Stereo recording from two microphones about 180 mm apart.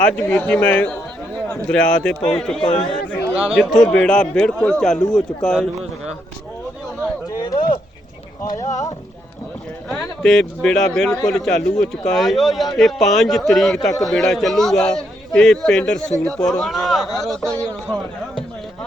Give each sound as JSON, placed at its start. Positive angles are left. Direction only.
{"t": 0.0, "sound": "a man's voice", "side_deg": 5}
{"t": 7.3, "sound": "a sound", "side_deg": 20}
{"t": 8.4, "sound": "speech", "side_deg": 20}
{"t": 10.2, "sound": "a man's voice", "side_deg": 5}